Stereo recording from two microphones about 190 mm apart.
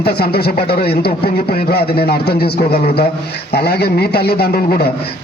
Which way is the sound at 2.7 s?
30° left (ahead or behind).